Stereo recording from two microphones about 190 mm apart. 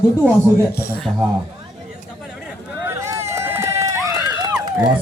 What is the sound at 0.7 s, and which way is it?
Speech, 55° left (ahead or behind).